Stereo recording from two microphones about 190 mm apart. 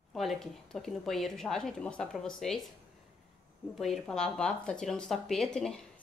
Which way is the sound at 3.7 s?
Centre (ahead or behind).